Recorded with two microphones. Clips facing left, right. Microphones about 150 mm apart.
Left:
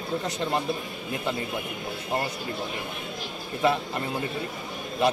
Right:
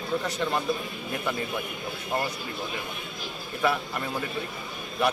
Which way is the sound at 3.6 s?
25° left (ahead or behind).